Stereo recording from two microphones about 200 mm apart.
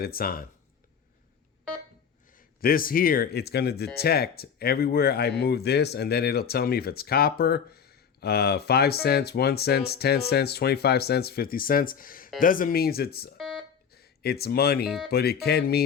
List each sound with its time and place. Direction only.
0.0 s speech: 50° left (ahead or behind)
2.6 s speech: 45° left (ahead or behind)
14.8 s speech: centre (ahead or behind)
15.1 s speech: 50° left (ahead or behind)